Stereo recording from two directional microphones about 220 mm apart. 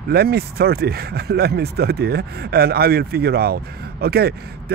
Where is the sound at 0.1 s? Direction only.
45° right (ahead or behind).